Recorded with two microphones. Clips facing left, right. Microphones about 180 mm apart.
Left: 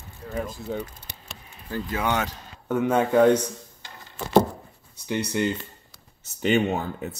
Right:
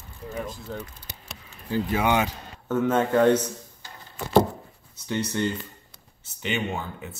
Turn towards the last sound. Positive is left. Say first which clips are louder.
# left 5 dB
turn(degrees=40)  # may be behind; listen again after turning